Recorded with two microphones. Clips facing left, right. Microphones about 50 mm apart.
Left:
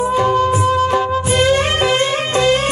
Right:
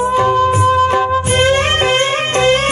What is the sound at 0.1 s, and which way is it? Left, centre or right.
Music, right.